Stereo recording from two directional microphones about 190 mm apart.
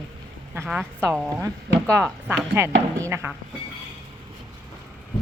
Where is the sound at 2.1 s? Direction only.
5° left (ahead or behind).